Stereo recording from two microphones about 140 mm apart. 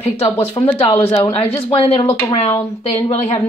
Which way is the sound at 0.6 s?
20° left (ahead or behind).